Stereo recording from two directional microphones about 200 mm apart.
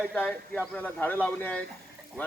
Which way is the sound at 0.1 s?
5° left (ahead or behind).